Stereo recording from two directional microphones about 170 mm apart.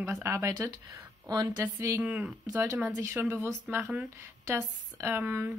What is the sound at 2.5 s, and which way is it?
Speech, 20° right (ahead or behind).